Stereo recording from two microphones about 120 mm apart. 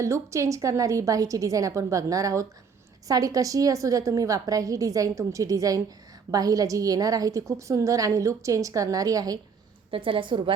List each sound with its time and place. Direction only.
0.0 s a woman's voice: 25° right (ahead or behind)
9.9 s a woman's voice: 45° right (ahead or behind)